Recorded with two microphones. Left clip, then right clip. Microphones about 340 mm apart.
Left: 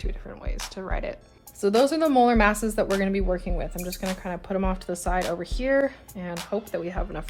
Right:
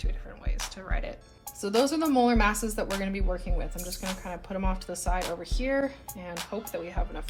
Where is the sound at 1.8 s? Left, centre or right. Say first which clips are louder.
Left 4 dB; left.